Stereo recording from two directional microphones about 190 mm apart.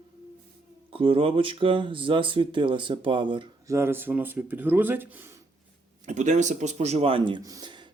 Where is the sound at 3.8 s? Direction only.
10° right (ahead or behind).